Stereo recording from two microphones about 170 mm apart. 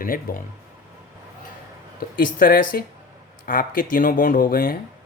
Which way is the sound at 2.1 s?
55° left (ahead or behind).